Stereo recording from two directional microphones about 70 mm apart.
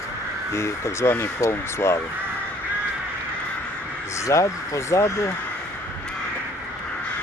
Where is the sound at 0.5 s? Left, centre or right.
Left.